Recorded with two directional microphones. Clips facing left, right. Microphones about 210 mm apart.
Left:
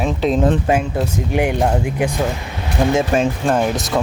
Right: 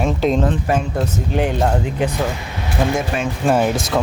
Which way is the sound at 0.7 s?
20° left (ahead or behind).